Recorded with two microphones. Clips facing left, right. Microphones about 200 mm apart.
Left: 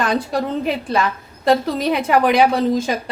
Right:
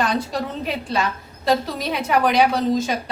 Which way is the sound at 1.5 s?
50° left (ahead or behind).